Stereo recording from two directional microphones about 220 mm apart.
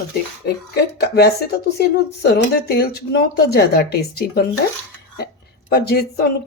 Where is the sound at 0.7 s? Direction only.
45° left (ahead or behind).